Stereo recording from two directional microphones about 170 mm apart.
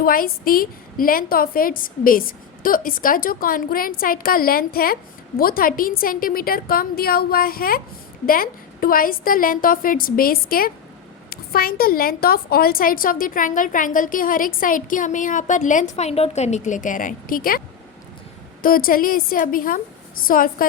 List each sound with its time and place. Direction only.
0.0 s a woman's voice: 55° left (ahead or behind)
18.6 s a woman's voice: 55° left (ahead or behind)